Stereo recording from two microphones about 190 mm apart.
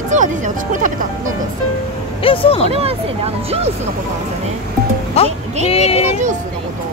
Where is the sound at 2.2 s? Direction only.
30° left (ahead or behind).